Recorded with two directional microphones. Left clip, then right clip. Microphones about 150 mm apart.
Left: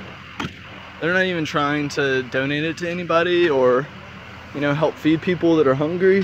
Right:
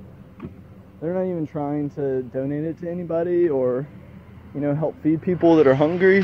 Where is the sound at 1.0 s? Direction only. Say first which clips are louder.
Left 5 dB; 35° left (ahead or behind).